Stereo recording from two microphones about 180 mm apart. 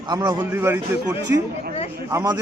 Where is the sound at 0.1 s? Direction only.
20° right (ahead or behind).